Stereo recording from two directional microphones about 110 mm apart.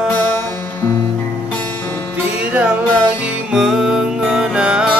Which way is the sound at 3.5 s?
5° right (ahead or behind).